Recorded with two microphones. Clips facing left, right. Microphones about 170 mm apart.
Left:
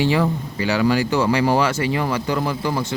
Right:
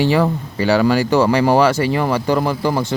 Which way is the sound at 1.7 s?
45° right (ahead or behind).